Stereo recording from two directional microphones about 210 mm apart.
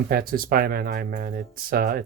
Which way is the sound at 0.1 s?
45° right (ahead or behind).